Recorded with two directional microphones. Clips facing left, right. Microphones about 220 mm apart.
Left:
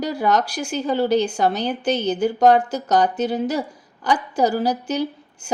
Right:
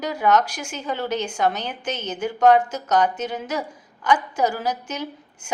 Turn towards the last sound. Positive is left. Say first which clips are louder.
# left 6 dB
turn(degrees=35)  # may be behind; listen again after turning